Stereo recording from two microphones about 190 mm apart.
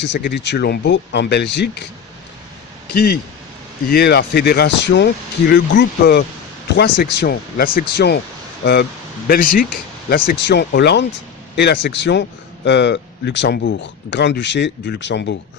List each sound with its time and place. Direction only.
0.0 s speech: 60° left (ahead or behind)
2.9 s speech: 55° left (ahead or behind)